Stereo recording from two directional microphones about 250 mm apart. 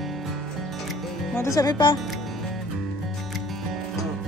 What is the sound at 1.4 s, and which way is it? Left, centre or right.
Speech, centre.